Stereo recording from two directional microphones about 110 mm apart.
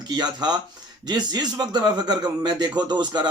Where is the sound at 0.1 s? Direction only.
40° right (ahead or behind).